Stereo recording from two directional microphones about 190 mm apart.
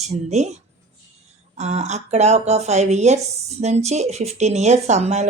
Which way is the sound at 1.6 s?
35° right (ahead or behind).